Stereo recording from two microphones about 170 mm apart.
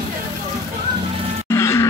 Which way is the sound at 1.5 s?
15° left (ahead or behind).